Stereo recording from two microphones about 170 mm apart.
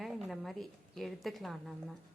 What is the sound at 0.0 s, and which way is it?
A woman's voice, centre (ahead or behind).